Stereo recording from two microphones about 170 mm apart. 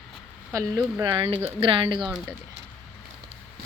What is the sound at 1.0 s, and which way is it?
Speech, 30° right (ahead or behind).